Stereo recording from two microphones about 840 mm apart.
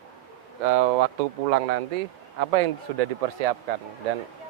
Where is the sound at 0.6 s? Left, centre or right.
Right.